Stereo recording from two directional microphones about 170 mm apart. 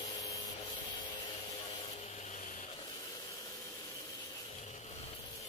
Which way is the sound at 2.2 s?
45° left (ahead or behind).